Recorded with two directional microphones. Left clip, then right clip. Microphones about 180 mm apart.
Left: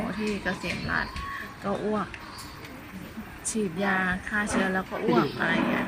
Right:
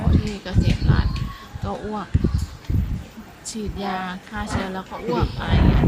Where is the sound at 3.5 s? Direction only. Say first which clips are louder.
Left 1 dB; 5° right (ahead or behind).